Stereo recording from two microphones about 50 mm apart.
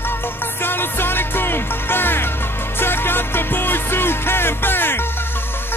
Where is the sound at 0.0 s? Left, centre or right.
Left.